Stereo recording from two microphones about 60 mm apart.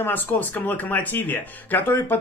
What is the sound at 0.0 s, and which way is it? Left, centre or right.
Speech, left.